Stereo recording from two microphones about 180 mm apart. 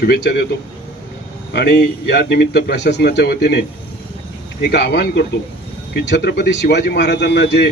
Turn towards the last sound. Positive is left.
turn(degrees=65)  # may be behind; listen again after turning